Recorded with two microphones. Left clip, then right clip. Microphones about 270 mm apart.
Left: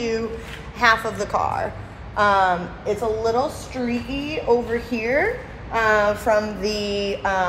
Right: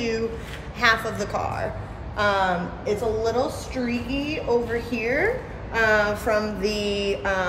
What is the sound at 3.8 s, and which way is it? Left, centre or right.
A woman's voice, centre.